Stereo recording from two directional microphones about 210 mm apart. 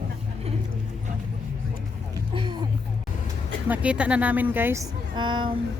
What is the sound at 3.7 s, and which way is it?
Speech, 5° right (ahead or behind).